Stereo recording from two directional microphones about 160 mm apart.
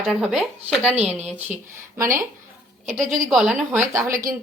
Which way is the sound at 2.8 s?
50° right (ahead or behind).